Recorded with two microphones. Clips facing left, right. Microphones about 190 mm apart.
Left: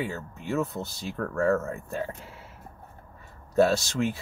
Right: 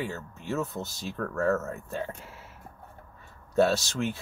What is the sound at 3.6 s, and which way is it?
Speech, centre (ahead or behind).